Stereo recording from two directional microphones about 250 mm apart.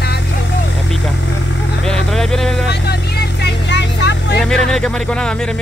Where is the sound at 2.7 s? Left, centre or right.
Left.